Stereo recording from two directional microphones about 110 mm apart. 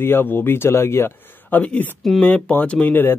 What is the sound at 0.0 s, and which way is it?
Speech, 20° left (ahead or behind).